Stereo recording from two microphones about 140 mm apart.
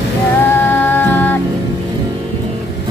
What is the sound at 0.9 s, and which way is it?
Music, 15° left (ahead or behind).